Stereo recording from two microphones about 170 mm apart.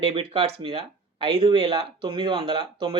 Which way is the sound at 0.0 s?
35° right (ahead or behind).